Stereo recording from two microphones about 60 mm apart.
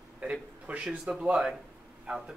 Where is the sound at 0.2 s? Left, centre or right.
Centre.